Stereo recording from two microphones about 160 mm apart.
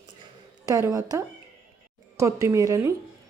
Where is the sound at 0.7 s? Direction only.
20° right (ahead or behind).